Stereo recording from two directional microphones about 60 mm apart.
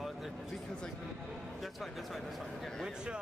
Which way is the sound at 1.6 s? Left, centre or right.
Centre.